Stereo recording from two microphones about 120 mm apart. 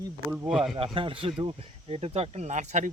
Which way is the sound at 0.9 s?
45° right (ahead or behind).